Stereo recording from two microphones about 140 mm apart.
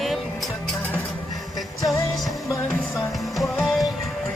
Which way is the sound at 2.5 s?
20° left (ahead or behind).